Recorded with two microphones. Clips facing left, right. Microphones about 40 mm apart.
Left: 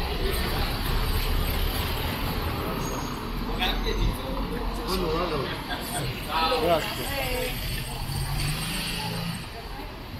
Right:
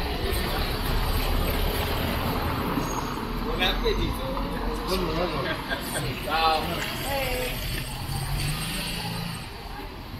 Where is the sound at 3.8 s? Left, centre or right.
Centre.